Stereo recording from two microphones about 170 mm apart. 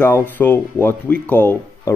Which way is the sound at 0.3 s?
10° left (ahead or behind).